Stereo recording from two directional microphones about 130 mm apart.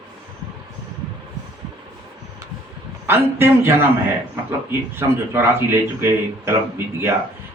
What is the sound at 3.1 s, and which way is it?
Speech, 15° right (ahead or behind).